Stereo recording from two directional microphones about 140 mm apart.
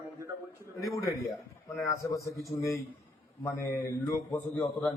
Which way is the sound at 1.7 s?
20° left (ahead or behind).